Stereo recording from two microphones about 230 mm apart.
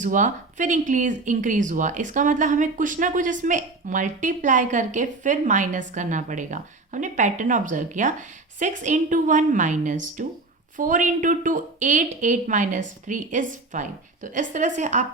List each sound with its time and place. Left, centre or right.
0.0 s speech: right